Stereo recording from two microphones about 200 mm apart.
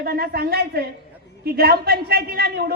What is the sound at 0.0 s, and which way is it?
A woman's voice, 50° right (ahead or behind).